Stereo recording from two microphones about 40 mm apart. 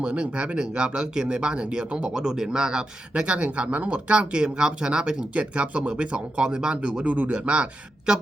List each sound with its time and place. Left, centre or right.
0.0 s speech: right
2.1 s speech: centre
5.3 s speech: right